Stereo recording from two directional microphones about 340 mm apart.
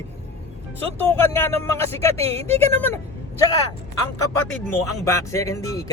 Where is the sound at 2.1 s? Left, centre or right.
Centre.